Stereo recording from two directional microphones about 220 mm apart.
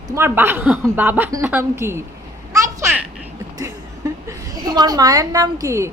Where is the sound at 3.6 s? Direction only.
15° right (ahead or behind).